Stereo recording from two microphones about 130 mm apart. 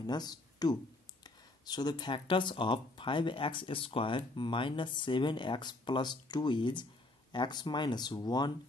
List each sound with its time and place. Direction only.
0.0 s speech: 30° left (ahead or behind)